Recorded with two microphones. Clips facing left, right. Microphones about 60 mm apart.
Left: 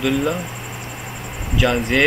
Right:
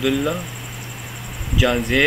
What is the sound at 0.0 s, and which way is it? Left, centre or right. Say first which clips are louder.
Speech: left 1 dB; centre.